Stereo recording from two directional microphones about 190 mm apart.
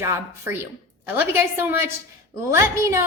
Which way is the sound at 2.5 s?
15° right (ahead or behind).